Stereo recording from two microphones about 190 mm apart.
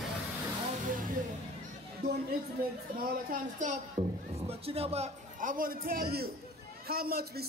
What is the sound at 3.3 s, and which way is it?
A man's voice, 40° right (ahead or behind).